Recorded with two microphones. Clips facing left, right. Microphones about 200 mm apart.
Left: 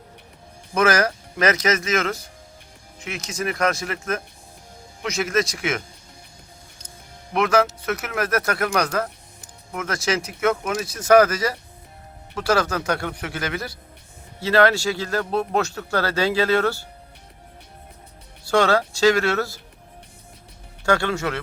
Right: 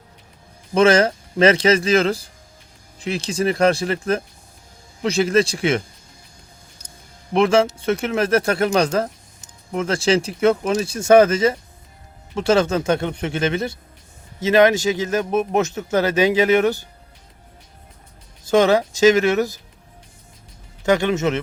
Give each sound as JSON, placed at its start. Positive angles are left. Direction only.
{"t": 0.7, "sound": "a man's voice", "side_deg": -25}
{"t": 7.3, "sound": "a man's voice", "side_deg": -30}
{"t": 18.4, "sound": "a man's voice", "side_deg": -20}
{"t": 20.8, "sound": "a man's voice", "side_deg": -20}